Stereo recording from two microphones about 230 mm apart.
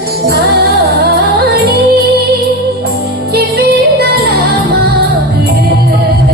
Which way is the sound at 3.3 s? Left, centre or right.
Right.